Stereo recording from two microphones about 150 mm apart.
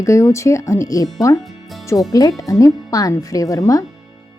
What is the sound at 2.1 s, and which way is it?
Speech, 25° left (ahead or behind).